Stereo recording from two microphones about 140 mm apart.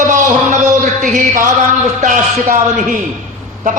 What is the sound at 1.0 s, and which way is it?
Music, 65° right (ahead or behind).